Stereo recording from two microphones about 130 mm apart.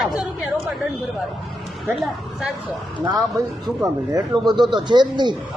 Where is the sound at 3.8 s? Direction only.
25° right (ahead or behind).